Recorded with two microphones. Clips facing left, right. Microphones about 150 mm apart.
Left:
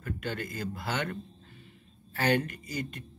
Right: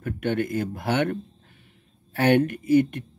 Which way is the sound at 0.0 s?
60° right (ahead or behind).